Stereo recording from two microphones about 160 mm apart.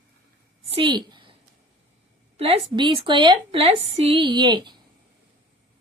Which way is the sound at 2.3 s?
40° right (ahead or behind).